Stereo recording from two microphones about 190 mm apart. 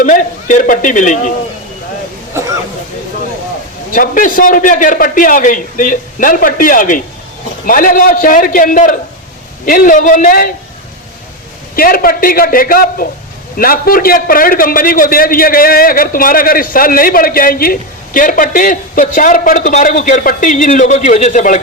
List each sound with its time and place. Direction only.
0.0 s a man's voice: 40° left (ahead or behind)
3.9 s a man's voice: 45° left (ahead or behind)
11.8 s a man's voice: 50° left (ahead or behind)